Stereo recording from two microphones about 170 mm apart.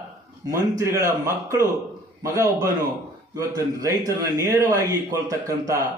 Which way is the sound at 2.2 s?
20° right (ahead or behind).